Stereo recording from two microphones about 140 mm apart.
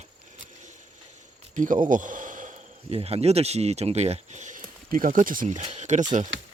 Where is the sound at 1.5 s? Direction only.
65° right (ahead or behind).